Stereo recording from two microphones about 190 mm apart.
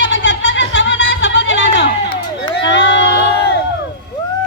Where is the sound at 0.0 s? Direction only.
65° left (ahead or behind).